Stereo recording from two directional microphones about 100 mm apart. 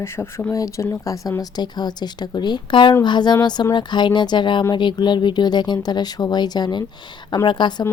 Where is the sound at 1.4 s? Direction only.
45° left (ahead or behind).